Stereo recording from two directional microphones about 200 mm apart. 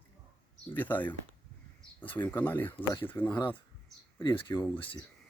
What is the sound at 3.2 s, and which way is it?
Speech, 20° left (ahead or behind).